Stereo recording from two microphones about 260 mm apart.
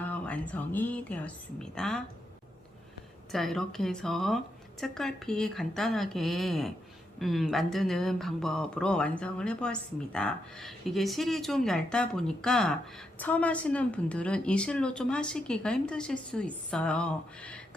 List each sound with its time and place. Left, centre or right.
0.0 s speech: centre
3.3 s speech: centre